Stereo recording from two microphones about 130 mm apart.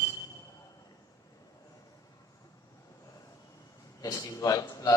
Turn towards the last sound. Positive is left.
turn(degrees=30)  # may be behind; listen again after turning